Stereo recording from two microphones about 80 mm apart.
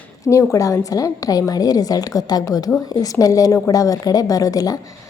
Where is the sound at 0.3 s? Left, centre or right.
Left.